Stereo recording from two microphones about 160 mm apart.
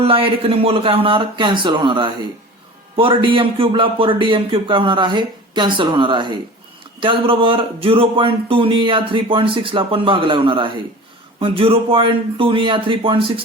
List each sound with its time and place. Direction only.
0.0 s speech: 35° right (ahead or behind)